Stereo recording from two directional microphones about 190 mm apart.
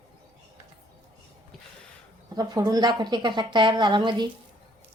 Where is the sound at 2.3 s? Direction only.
20° right (ahead or behind).